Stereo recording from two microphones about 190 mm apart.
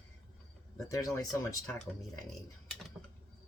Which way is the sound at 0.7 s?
15° left (ahead or behind).